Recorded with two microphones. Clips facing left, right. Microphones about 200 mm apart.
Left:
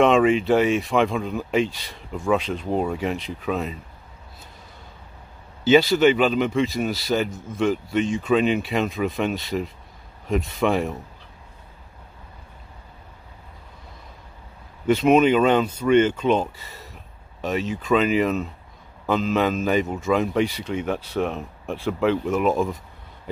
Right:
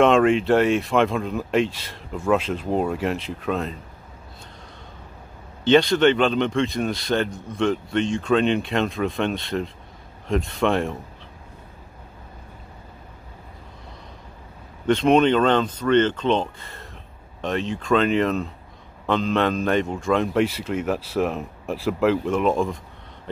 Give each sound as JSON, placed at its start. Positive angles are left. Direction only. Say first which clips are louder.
{"t": 0.0, "sound": "speech", "louder": "even", "side_deg": 0}
{"t": 5.6, "sound": "speech", "louder": "even", "side_deg": 5}
{"t": 14.9, "sound": "speech", "louder": "even", "side_deg": 5}